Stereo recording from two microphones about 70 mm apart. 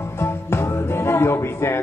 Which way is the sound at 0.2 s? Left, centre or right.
Left.